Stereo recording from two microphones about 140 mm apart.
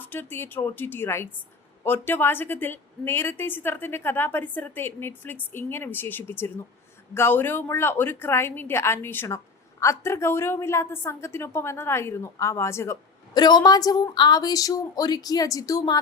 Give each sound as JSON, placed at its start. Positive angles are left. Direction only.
{"t": 0.0, "sound": "a woman's voice", "side_deg": 15}